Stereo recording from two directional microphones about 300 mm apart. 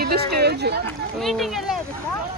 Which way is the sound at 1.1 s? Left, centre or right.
Centre.